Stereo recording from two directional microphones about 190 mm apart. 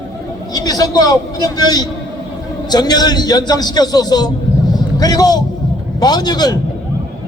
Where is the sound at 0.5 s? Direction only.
20° left (ahead or behind).